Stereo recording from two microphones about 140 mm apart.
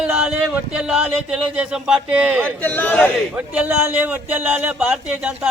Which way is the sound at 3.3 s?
10° right (ahead or behind).